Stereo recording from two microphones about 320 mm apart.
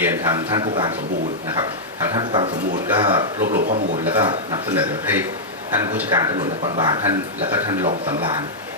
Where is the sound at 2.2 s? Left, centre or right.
Centre.